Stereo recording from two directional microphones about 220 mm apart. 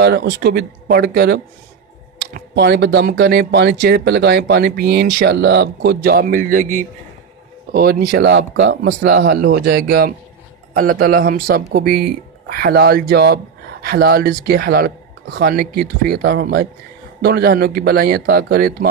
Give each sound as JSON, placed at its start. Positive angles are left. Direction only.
{"t": 0.0, "sound": "speech", "side_deg": -50}